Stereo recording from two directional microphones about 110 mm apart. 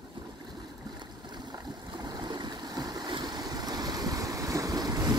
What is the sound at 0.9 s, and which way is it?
Stream, 40° right (ahead or behind).